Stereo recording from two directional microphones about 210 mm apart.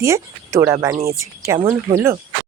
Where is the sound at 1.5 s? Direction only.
25° right (ahead or behind).